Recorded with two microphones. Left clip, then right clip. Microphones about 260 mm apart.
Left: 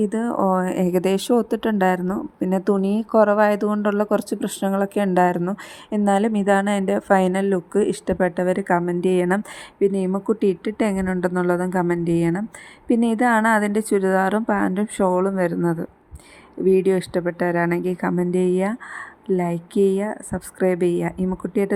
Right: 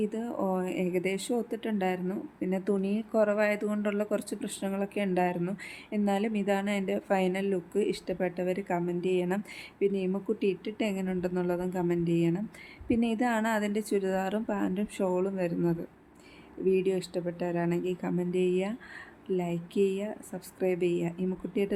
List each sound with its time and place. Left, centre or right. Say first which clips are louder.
0.0 s speech: left 11 dB; left